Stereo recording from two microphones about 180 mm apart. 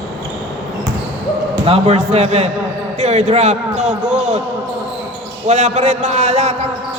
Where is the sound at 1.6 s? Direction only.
35° right (ahead or behind).